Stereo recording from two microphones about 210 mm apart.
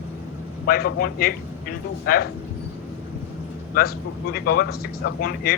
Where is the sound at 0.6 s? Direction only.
45° left (ahead or behind).